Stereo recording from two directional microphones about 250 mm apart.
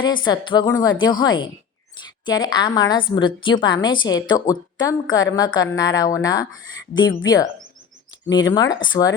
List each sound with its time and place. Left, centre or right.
0.0 s a woman's voice: centre
8.3 s a woman's voice: centre